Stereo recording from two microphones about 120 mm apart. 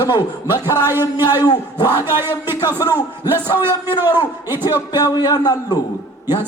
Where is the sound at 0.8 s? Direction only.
20° right (ahead or behind).